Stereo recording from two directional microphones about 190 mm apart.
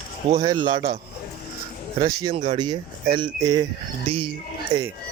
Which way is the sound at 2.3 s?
35° right (ahead or behind).